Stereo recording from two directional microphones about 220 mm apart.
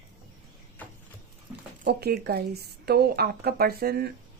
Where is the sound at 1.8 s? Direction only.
50° right (ahead or behind).